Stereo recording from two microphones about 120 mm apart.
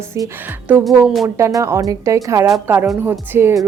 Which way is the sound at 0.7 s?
15° right (ahead or behind).